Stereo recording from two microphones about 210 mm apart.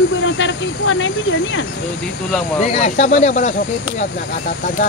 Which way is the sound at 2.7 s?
35° left (ahead or behind).